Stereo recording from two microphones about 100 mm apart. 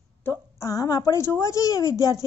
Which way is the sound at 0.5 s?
35° left (ahead or behind).